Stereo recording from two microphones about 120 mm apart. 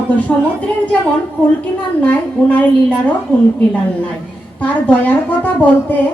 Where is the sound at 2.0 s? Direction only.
10° left (ahead or behind).